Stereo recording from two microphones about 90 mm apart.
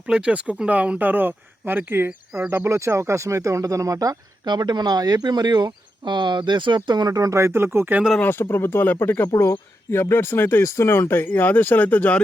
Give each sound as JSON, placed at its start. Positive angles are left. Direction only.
{"t": 0.1, "sound": "speech", "side_deg": -10}
{"t": 8.2, "sound": "speech", "side_deg": 25}